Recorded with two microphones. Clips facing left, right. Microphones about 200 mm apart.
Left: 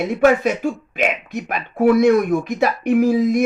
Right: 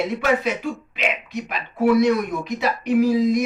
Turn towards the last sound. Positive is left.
turn(degrees=50)  # may be behind; listen again after turning